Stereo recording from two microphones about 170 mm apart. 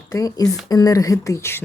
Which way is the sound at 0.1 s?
20° left (ahead or behind).